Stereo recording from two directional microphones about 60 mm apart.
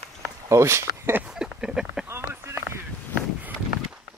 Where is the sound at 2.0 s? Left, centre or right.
Right.